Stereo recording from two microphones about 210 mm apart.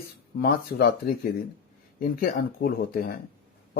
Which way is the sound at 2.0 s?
45° left (ahead or behind).